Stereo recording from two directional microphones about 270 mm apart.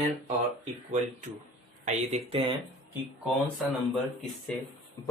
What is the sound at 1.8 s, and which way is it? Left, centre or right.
Speech, right.